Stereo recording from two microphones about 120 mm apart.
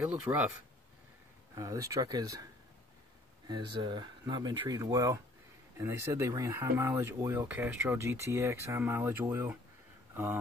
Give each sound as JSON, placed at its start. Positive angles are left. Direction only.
{"t": 0.0, "sound": "speech", "side_deg": -10}
{"t": 1.5, "sound": "speech", "side_deg": -25}
{"t": 3.4, "sound": "speech", "side_deg": -40}
{"t": 7.3, "sound": "speech", "side_deg": -15}